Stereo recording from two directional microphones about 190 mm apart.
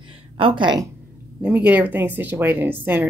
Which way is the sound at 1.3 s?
5° right (ahead or behind).